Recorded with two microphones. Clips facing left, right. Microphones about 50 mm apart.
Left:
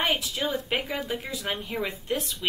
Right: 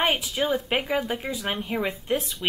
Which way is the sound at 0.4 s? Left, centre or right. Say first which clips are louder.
Right 4 dB; right.